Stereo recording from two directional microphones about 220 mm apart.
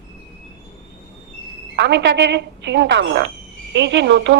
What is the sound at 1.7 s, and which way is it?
A woman's voice, 50° right (ahead or behind).